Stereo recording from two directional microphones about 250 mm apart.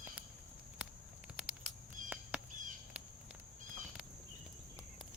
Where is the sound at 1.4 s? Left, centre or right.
Centre.